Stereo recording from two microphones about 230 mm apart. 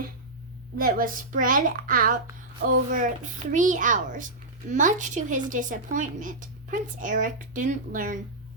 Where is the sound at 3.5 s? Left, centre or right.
Right.